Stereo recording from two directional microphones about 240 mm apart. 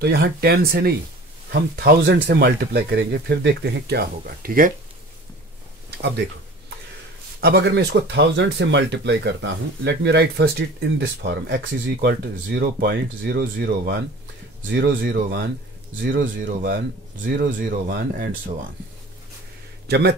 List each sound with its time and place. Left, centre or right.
0.0 s speech: right
5.9 s speech: right
7.3 s speech: right
19.9 s speech: right